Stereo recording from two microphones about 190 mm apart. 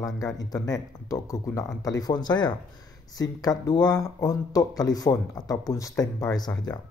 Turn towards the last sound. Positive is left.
turn(degrees=20)  # may be behind; listen again after turning